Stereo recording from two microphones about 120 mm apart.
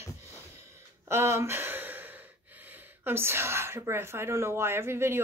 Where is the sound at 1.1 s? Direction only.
20° right (ahead or behind).